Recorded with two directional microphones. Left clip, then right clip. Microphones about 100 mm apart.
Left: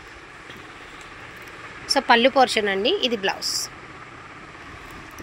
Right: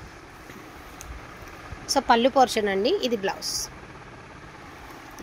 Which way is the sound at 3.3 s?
45° right (ahead or behind).